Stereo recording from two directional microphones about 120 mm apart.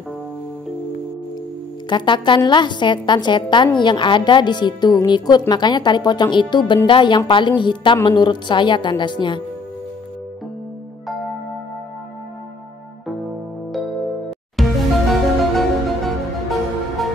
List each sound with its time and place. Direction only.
1.9 s a woman's voice: 40° left (ahead or behind)
14.6 s music: centre (ahead or behind)